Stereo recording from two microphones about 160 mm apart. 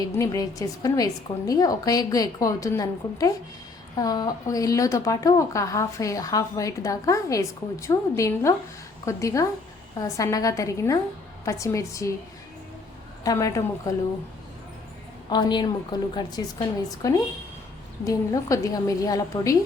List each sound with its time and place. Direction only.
0.0 s a woman's voice: 20° left (ahead or behind)
13.2 s a woman's voice: 20° left (ahead or behind)
15.3 s a woman's voice: 25° left (ahead or behind)